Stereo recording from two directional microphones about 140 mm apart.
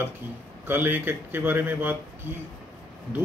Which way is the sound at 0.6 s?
15° right (ahead or behind).